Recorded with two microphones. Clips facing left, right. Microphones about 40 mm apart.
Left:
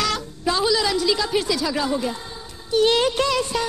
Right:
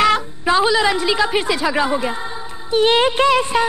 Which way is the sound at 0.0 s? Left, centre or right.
Right.